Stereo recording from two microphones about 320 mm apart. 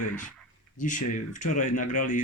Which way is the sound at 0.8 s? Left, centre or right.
Left.